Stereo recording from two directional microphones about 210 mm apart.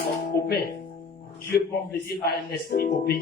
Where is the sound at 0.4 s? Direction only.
50° left (ahead or behind).